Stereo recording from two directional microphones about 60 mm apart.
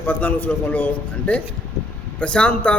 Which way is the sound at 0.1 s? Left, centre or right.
Left.